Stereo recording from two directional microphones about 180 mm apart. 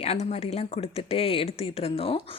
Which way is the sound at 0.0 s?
35° left (ahead or behind).